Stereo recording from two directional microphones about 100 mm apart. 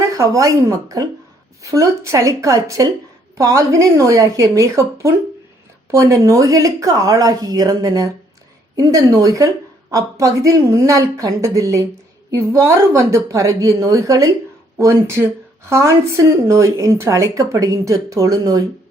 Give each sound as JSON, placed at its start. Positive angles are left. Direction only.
{"t": 0.2, "sound": "speech", "side_deg": -30}